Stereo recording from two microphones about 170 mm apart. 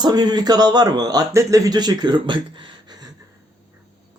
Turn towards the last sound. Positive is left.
turn(degrees=-25)  # may be behind; listen again after turning